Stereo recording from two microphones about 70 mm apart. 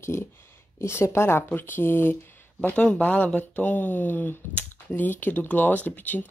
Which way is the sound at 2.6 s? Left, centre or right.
Centre.